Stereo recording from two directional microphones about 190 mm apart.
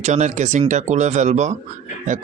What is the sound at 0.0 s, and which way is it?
Speech, 40° right (ahead or behind).